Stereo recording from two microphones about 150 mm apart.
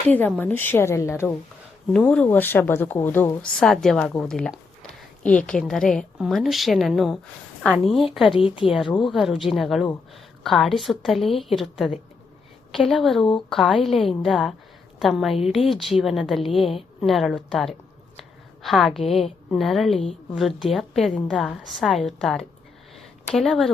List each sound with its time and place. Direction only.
0.3 s speech: 10° left (ahead or behind)
1.9 s a woman's voice: 5° left (ahead or behind)
8.3 s a woman's voice: 35° left (ahead or behind)
8.7 s a woman's voice: centre (ahead or behind)
23.0 s a sound: centre (ahead or behind)